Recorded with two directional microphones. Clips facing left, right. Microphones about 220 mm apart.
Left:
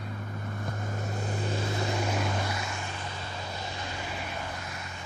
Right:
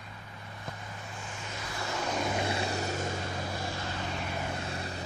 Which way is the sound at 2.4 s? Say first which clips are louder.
Right 3 dB; 30° right (ahead or behind).